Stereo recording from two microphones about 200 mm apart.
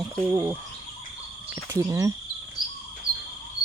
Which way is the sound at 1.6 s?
15° right (ahead or behind).